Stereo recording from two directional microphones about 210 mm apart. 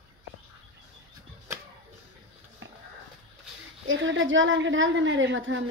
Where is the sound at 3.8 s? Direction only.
65° right (ahead or behind).